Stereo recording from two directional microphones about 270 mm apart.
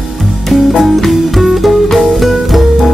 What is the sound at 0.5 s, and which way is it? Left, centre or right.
Music, centre.